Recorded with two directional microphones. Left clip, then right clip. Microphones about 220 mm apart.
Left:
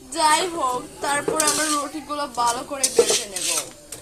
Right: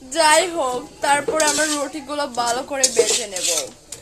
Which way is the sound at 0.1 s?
40° right (ahead or behind).